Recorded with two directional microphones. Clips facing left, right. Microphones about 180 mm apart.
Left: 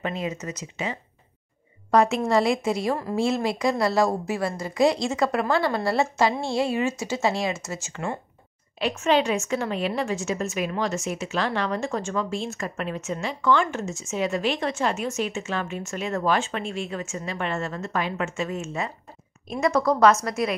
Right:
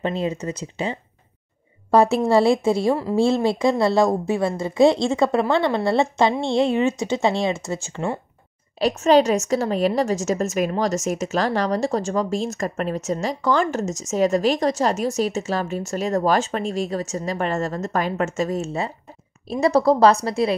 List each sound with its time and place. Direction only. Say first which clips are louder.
0.0 s a woman's voice: right 5 dB; 30° right (ahead or behind)
6.9 s speech: right 5 dB; 5° left (ahead or behind)
7.7 s a woman's voice: right 5 dB; 30° right (ahead or behind)
8.7 s a woman's voice: right 6 dB; 40° right (ahead or behind)